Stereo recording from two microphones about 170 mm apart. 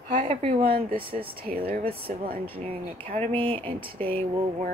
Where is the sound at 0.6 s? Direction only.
60° right (ahead or behind).